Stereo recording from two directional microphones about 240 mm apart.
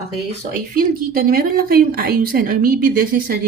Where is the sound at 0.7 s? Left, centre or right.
Right.